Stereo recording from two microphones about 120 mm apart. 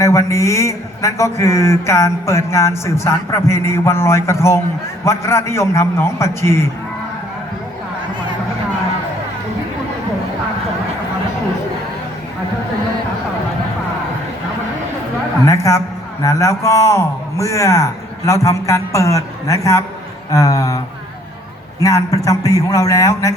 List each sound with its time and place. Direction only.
0.0 s speech: 25° left (ahead or behind)
15.4 s speech: 25° left (ahead or behind)